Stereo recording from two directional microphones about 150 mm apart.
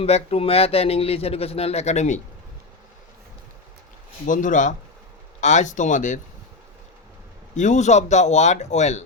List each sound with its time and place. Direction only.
0.0 s a man's voice: 40° left (ahead or behind)
4.3 s speech: 60° left (ahead or behind)
7.5 s a man's voice: 55° left (ahead or behind)